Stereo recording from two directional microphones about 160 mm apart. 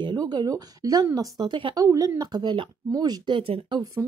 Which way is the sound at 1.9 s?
20° right (ahead or behind).